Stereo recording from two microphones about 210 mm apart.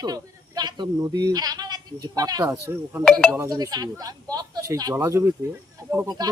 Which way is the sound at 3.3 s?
15° right (ahead or behind).